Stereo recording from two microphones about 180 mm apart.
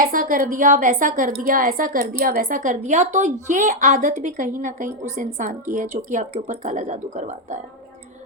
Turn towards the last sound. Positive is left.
turn(degrees=-40)  # may be behind; listen again after turning